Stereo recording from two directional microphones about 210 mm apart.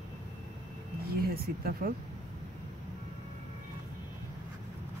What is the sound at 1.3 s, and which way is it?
Speech, 45° right (ahead or behind).